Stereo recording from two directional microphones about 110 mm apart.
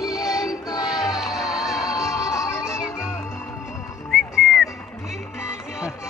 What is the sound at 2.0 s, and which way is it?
Music, 30° left (ahead or behind).